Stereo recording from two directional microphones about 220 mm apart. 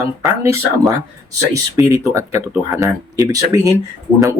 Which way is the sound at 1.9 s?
15° right (ahead or behind).